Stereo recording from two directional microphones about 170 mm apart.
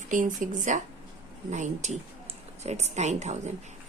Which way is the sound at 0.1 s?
50° right (ahead or behind).